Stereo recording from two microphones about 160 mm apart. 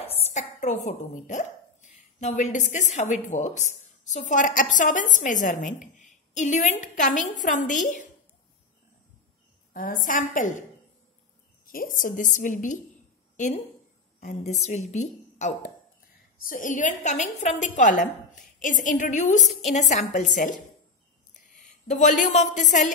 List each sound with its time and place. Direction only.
0.0 s speech: 40° left (ahead or behind)
9.8 s a woman's voice: 55° left (ahead or behind)
11.6 s a woman's voice: 60° left (ahead or behind)
14.2 s a woman's voice: 45° left (ahead or behind)
16.3 s a woman's voice: 60° left (ahead or behind)
21.8 s a woman's voice: 50° left (ahead or behind)